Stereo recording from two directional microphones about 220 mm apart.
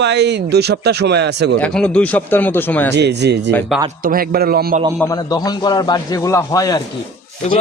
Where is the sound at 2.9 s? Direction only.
50° right (ahead or behind).